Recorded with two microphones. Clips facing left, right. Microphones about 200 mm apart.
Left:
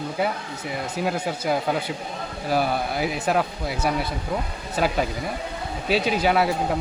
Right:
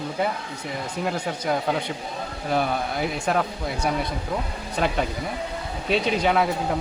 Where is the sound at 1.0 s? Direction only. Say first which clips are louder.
Left 1 dB; 5° left (ahead or behind).